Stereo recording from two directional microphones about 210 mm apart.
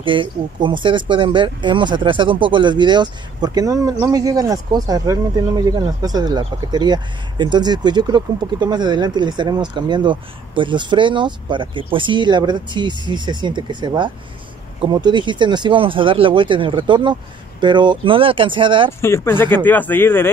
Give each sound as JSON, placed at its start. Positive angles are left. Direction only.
{"t": 0.0, "sound": "speech", "side_deg": -25}
{"t": 18.9, "sound": "speech", "side_deg": 10}